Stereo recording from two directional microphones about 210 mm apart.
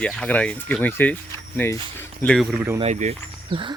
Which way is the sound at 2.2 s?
Centre (ahead or behind).